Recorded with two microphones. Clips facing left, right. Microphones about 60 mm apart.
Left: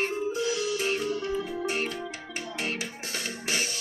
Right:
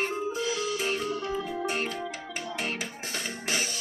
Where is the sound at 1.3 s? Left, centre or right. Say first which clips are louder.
Left 1 dB; centre.